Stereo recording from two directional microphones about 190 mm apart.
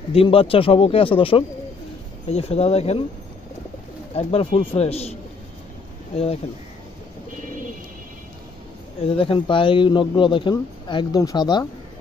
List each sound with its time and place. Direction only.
0.1 s speech: 30° left (ahead or behind)
4.1 s speech: 35° left (ahead or behind)
6.1 s speech: 30° left (ahead or behind)
9.2 s speech: 25° left (ahead or behind)